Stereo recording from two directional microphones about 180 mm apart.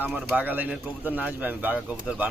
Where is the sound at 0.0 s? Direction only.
10° right (ahead or behind).